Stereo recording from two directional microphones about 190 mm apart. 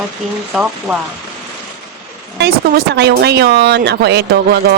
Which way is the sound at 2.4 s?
55° right (ahead or behind).